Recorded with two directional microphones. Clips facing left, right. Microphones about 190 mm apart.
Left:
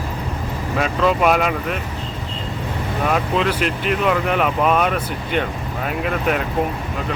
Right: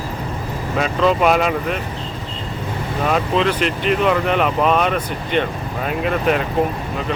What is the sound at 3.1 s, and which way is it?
Speech, 5° left (ahead or behind).